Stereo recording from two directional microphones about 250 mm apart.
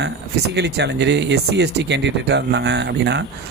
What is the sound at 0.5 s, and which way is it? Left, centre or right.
Speech, right.